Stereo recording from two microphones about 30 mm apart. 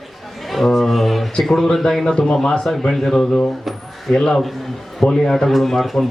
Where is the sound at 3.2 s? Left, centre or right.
Left.